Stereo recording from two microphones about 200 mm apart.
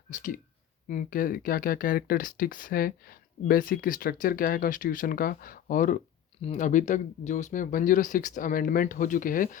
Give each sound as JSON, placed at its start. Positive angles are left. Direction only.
{"t": 0.1, "sound": "speech", "side_deg": 40}